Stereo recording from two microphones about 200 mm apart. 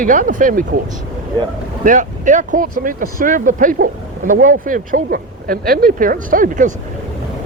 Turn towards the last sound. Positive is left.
turn(degrees=-40)  # may be behind; listen again after turning